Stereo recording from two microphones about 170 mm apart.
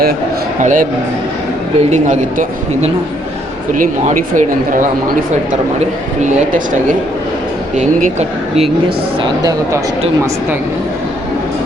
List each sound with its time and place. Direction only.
0.6 s speech: 50° right (ahead or behind)
1.9 s speech: 45° right (ahead or behind)
6.2 s speech: 50° right (ahead or behind)
9.2 s speech: 20° right (ahead or behind)